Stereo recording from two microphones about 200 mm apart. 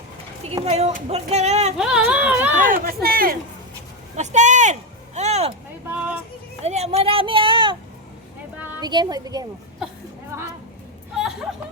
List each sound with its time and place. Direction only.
0.4 s speech: 30° right (ahead or behind)
1.8 s a sound: 5° right (ahead or behind)
2.6 s speech: 50° right (ahead or behind)
4.2 s speech: 35° right (ahead or behind)
5.9 s a sound: 5° right (ahead or behind)
6.6 s speech: 30° right (ahead or behind)
8.8 s a woman's voice: 20° right (ahead or behind)
11.1 s music: centre (ahead or behind)